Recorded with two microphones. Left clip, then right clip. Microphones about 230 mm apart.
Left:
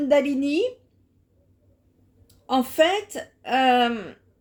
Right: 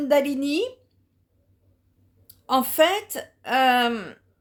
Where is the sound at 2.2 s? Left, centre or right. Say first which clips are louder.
Right 1 dB; right.